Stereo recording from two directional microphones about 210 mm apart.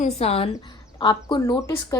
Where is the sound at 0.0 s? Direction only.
30° left (ahead or behind).